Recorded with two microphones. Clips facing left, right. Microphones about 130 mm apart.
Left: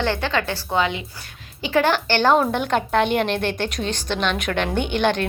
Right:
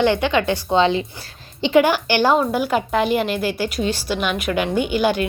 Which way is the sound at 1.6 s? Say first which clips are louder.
Right 4 dB; 15° right (ahead or behind).